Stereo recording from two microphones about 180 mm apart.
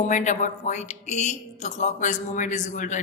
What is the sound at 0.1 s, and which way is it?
A woman's voice, 40° left (ahead or behind).